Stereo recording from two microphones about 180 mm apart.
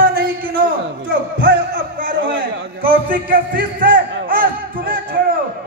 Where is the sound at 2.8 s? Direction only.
55° right (ahead or behind).